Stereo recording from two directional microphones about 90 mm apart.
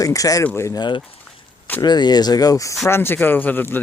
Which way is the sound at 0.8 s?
60° left (ahead or behind).